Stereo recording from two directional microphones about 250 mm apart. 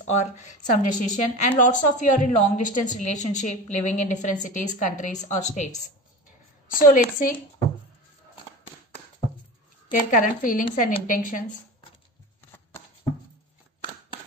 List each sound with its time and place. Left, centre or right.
0.1 s a woman's voice: left
6.7 s speech: left
9.8 s speech: left
12.4 s shuffling cards: centre